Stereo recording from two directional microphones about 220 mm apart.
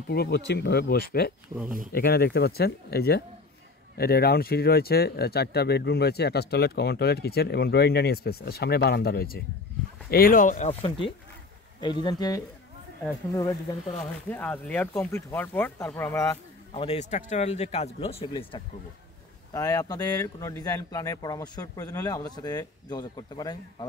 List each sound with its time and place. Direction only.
0.1 s speech: 45° left (ahead or behind); by 13.7 s 15° left (ahead or behind)
14.3 s speech: 5° left (ahead or behind)
16.7 s speech: 25° left (ahead or behind)
19.5 s speech: 15° left (ahead or behind)